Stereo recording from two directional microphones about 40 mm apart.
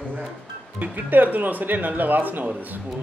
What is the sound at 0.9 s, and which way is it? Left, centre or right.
A man's voice, right.